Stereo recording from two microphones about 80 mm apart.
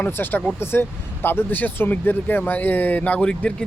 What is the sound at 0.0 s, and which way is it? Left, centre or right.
Speech, left.